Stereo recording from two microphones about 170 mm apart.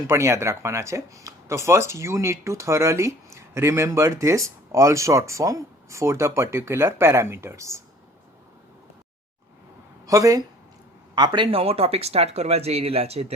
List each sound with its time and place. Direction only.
0.1 s speech: 15° right (ahead or behind)
10.1 s speech: 20° right (ahead or behind); by 13.3 s 35° right (ahead or behind)